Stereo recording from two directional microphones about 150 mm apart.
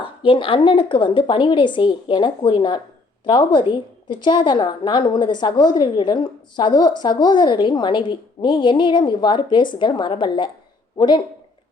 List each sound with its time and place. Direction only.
0.3 s a woman's voice: 35° left (ahead or behind)